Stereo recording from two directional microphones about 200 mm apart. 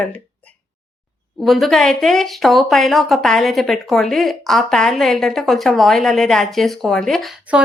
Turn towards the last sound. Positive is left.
turn(degrees=-5)  # may be behind; listen again after turning